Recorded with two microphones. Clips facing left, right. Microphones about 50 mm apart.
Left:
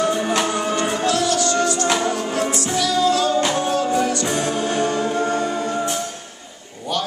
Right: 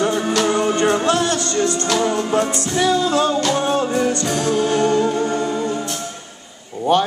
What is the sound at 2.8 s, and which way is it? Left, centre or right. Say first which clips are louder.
Music: right 2 dB; right.